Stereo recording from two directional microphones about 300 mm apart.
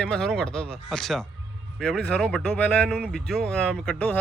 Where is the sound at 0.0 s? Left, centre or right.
Centre.